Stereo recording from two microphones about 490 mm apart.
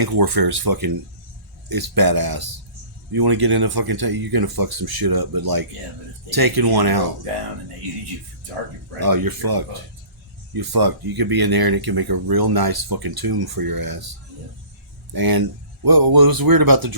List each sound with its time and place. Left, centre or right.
0.0 s speech: right
9.0 s speech: right
15.1 s speech: right